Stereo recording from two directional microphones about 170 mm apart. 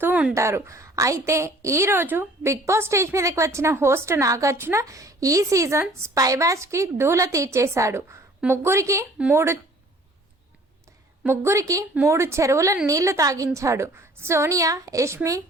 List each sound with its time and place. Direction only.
0.0 s a sound: 10° right (ahead or behind)
0.3 s a woman's voice: 15° right (ahead or behind)
11.2 s a woman's voice: 15° right (ahead or behind)